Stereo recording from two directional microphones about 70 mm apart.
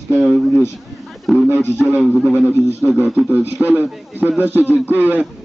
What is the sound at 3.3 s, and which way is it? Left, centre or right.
A man's voice, right.